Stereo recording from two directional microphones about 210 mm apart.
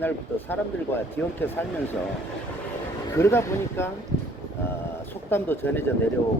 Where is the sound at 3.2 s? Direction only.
10° left (ahead or behind).